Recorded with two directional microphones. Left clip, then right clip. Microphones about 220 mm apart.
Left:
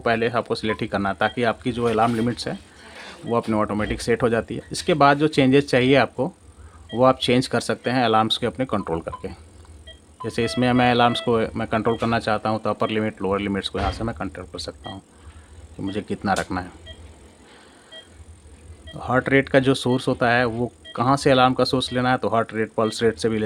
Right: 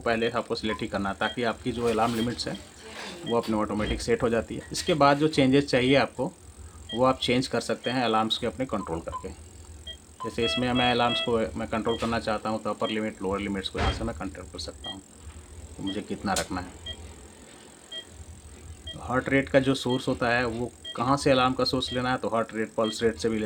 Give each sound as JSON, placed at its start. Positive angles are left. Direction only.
{"t": 0.0, "sound": "speech", "side_deg": 35}
{"t": 18.9, "sound": "speech", "side_deg": 35}